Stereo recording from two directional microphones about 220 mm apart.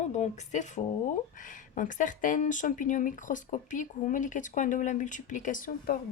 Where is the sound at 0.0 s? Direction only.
30° left (ahead or behind).